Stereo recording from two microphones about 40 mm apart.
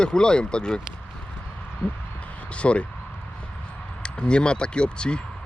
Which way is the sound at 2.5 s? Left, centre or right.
Left.